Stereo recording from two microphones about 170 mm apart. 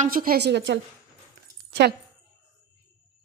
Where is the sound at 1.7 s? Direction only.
70° right (ahead or behind).